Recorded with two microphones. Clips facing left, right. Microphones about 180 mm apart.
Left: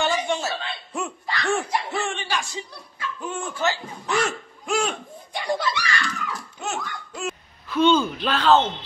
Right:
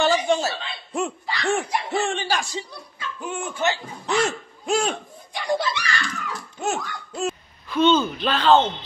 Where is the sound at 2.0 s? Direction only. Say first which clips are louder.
Right 4 dB; 35° right (ahead or behind).